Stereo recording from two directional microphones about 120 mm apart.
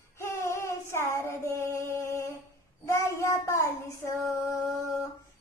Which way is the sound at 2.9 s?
20° left (ahead or behind).